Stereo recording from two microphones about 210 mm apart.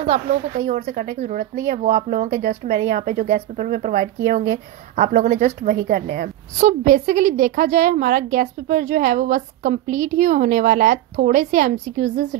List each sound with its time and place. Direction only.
0.0 s a woman's voice: 35° right (ahead or behind)